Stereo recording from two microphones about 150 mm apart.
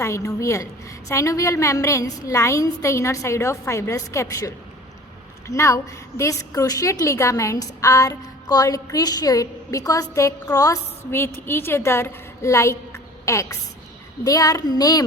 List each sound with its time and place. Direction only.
0.0 s a woman's voice: 20° left (ahead or behind)